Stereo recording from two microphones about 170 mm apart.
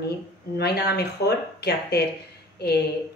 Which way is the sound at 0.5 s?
75° left (ahead or behind).